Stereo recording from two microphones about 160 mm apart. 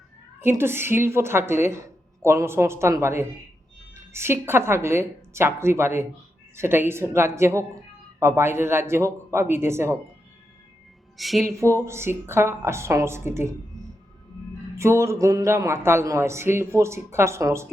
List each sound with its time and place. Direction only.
0.4 s speech: 15° right (ahead or behind)
11.2 s speech: centre (ahead or behind)
11.4 s speech: 15° right (ahead or behind)
14.8 s speech: 15° right (ahead or behind)